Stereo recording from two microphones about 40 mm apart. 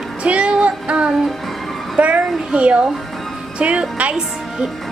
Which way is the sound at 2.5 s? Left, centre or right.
Right.